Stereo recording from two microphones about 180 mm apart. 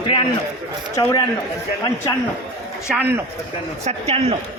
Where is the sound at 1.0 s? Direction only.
20° left (ahead or behind).